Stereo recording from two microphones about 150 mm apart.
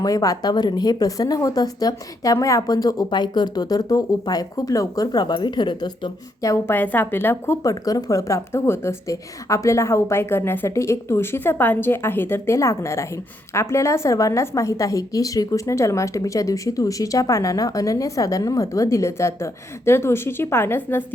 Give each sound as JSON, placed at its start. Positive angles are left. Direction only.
{"t": 0.0, "sound": "speech", "side_deg": 25}